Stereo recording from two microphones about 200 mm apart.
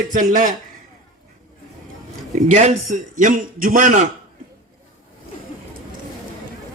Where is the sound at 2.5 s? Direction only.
40° right (ahead or behind).